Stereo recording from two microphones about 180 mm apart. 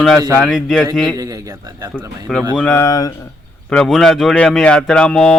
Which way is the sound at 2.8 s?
20° left (ahead or behind).